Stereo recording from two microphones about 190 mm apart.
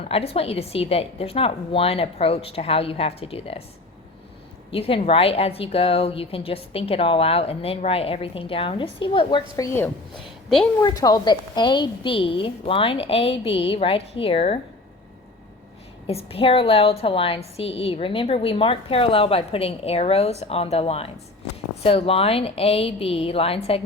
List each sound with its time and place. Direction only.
0.1 s a woman's voice: 30° left (ahead or behind)
4.7 s speech: 30° left (ahead or behind)
10.8 s speech: 20° left (ahead or behind)
16.0 s a woman's voice: 30° left (ahead or behind)